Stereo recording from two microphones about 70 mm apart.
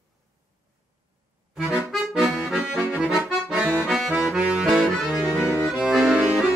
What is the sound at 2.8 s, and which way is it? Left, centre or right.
Accordion, centre.